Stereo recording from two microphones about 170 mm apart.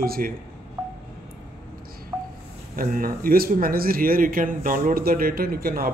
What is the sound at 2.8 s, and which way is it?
Speech, 55° right (ahead or behind).